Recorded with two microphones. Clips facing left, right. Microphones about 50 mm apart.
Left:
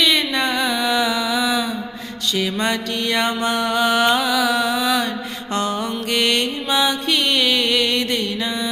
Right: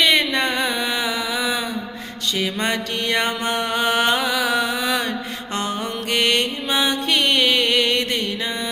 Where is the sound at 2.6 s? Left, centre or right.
Right.